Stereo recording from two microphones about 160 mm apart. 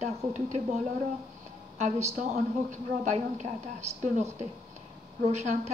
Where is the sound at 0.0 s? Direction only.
45° right (ahead or behind).